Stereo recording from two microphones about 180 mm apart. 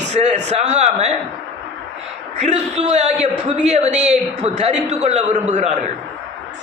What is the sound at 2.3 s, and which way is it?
A man's voice, 40° right (ahead or behind).